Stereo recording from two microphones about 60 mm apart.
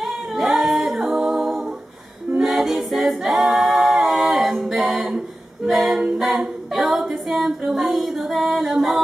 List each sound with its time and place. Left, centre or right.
0.0 s singing: centre
2.4 s a capella: centre